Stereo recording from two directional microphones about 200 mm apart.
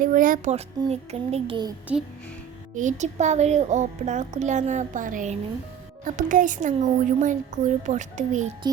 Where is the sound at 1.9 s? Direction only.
5° right (ahead or behind).